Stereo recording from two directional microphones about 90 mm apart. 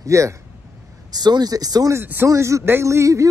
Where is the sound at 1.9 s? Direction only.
25° right (ahead or behind).